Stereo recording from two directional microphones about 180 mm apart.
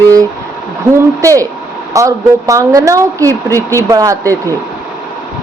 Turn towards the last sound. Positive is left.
turn(degrees=-15)  # may be behind; listen again after turning